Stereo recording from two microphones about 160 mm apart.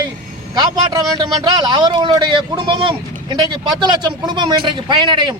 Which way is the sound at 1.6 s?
25° right (ahead or behind).